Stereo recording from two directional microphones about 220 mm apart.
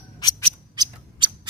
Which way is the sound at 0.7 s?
20° right (ahead or behind).